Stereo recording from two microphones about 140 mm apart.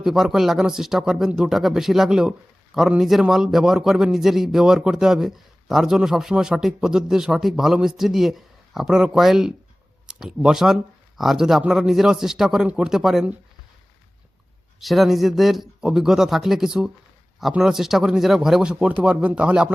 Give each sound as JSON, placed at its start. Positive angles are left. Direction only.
{"t": 0.0, "sound": "a man's voice", "side_deg": 0}
{"t": 14.8, "sound": "a man's voice", "side_deg": 0}